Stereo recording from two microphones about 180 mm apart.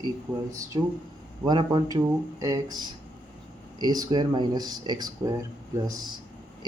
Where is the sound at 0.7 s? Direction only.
25° right (ahead or behind).